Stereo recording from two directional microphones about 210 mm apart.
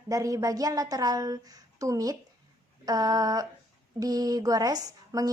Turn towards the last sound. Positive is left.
turn(degrees=-15)  # may be behind; listen again after turning